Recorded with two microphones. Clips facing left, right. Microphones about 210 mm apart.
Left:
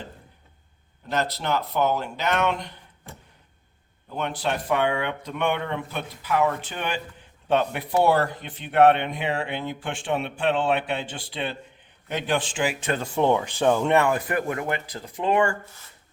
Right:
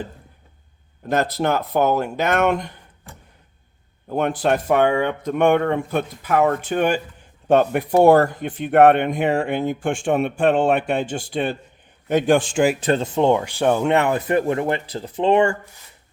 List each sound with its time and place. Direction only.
1.0 s speech: 50° right (ahead or behind)
4.1 s speech: 50° right (ahead or behind)
13.0 s speech: 20° right (ahead or behind)